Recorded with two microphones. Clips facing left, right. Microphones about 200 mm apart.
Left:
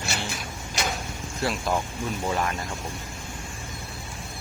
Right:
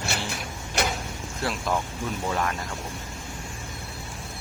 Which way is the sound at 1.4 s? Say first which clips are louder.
Left 1 dB; centre (ahead or behind).